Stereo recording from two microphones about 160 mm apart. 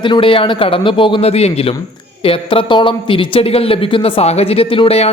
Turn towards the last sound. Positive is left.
turn(degrees=40)  # may be behind; listen again after turning